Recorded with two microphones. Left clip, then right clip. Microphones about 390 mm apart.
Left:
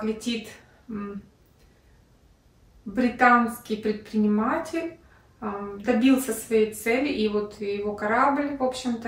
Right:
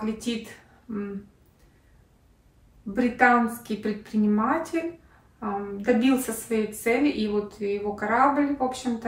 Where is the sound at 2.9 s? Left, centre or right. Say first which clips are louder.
Left 1 dB; centre.